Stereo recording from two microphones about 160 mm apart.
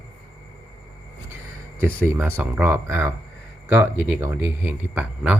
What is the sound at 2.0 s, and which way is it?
A man's voice, 15° right (ahead or behind).